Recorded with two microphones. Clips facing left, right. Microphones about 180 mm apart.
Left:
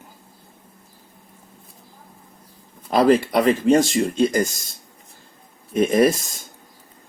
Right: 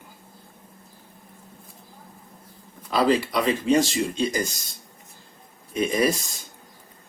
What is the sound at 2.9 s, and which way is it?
Speech, 50° left (ahead or behind).